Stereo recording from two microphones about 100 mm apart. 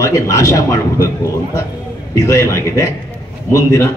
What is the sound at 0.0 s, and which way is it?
Speech, 30° left (ahead or behind).